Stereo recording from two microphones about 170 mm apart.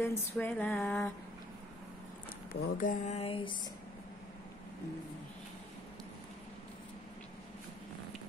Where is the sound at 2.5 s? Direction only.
50° left (ahead or behind); by 3.5 s 30° left (ahead or behind).